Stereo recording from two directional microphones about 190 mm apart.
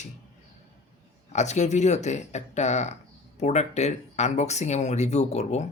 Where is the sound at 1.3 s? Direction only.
35° left (ahead or behind).